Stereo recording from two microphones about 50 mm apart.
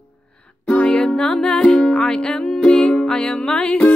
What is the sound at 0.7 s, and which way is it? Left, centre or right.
Music, centre.